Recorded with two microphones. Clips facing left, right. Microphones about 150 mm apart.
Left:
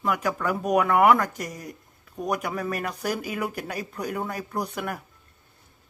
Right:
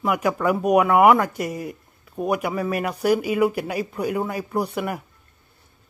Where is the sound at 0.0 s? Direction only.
10° right (ahead or behind).